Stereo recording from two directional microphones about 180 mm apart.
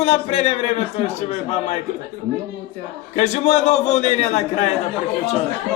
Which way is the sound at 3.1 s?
40° left (ahead or behind).